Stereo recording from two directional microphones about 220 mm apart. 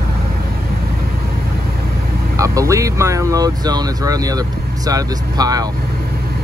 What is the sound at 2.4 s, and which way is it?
Speech, 15° right (ahead or behind).